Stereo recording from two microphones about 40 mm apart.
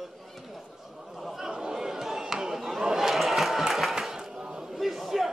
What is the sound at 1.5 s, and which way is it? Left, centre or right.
Chatter, centre.